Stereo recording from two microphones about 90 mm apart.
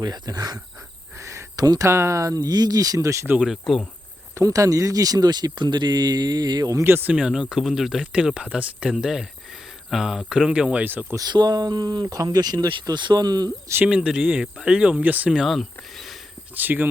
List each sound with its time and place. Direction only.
0.0 s speech: 50° right (ahead or behind)
1.1 s a sound: 35° right (ahead or behind)
1.9 s speech: 30° right (ahead or behind)
3.4 s speech: centre (ahead or behind)
4.4 s speech: 35° right (ahead or behind)
6.8 s speech: 25° right (ahead or behind)
7.2 s speech: 5° right (ahead or behind)
11.3 s speech: 50° right (ahead or behind)
13.8 s speech: 10° right (ahead or behind)
15.3 s speech: 5° right (ahead or behind)
16.6 s speech: 20° right (ahead or behind)